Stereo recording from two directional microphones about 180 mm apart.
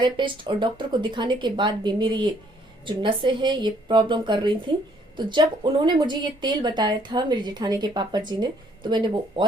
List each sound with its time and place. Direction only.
0.0 s speech: 25° right (ahead or behind)